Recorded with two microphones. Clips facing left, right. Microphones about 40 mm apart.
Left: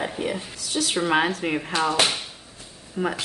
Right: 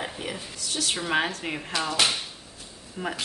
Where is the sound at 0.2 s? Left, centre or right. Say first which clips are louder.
Left 6 dB; centre.